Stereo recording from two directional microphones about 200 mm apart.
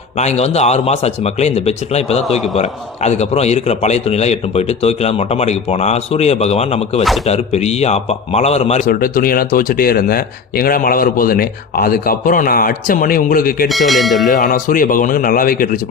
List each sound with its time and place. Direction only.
0.2 s a man's voice: 35° left (ahead or behind)
8.9 s speech: 45° left (ahead or behind)
13.7 s speech: centre (ahead or behind)
14.3 s speech: 40° left (ahead or behind)